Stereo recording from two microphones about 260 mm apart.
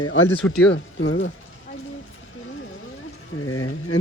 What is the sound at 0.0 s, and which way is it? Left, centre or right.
Speech, left.